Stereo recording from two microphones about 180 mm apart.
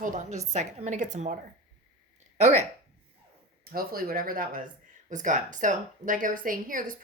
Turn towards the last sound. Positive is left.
turn(degrees=-50)  # may be behind; listen again after turning